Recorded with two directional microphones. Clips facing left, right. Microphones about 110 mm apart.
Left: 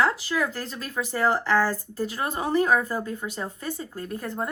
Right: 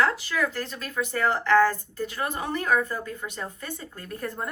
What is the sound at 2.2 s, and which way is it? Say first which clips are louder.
Speech: left 6 dB; 20° left (ahead or behind).